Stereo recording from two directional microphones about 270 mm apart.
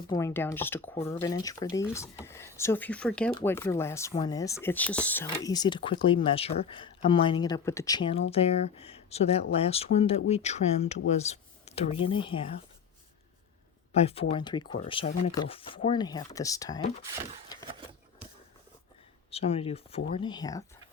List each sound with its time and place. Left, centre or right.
0.1 s speech: centre
13.9 s speech: left
19.3 s speech: left